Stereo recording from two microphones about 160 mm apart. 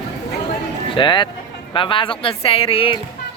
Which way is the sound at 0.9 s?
30° left (ahead or behind).